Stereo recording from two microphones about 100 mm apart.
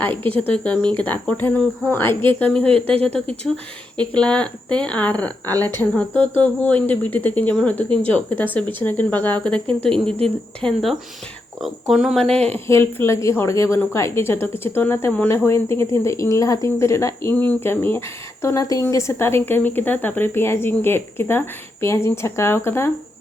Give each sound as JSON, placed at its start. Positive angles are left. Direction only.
{"t": 0.0, "sound": "speech", "side_deg": 20}
{"t": 2.5, "sound": "speech", "side_deg": 10}
{"t": 12.1, "sound": "speech", "side_deg": 10}
{"t": 12.4, "sound": "speech", "side_deg": -90}
{"t": 12.6, "sound": "speech", "side_deg": 25}